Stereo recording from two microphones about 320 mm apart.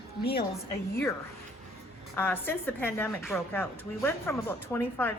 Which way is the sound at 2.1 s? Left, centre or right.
Centre.